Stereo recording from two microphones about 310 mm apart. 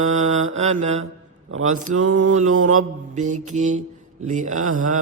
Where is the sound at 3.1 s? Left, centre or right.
Right.